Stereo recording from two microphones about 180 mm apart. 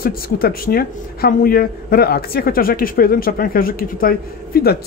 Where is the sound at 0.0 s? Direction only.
55° left (ahead or behind).